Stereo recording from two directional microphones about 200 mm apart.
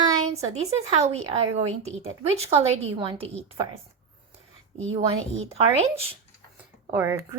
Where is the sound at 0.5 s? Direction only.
30° right (ahead or behind).